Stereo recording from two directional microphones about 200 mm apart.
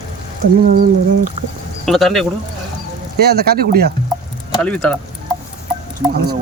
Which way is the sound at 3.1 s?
50° right (ahead or behind).